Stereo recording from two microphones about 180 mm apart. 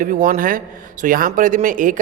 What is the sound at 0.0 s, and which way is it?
A man's voice, 50° right (ahead or behind).